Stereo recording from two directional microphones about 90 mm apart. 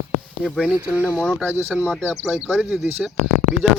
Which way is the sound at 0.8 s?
25° right (ahead or behind).